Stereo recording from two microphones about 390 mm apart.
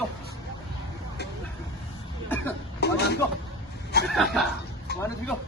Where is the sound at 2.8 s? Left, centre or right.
Left.